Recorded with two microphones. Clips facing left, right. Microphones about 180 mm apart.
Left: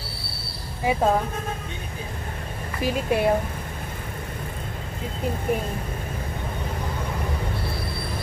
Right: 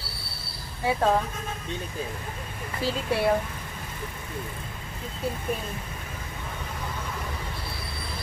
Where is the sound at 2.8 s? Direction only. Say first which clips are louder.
Left 4 dB; 15° left (ahead or behind).